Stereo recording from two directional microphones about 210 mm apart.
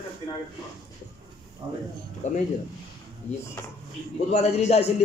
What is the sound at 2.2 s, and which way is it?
Speech, 30° left (ahead or behind).